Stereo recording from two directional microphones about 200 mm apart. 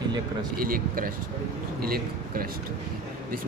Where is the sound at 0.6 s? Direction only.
45° right (ahead or behind).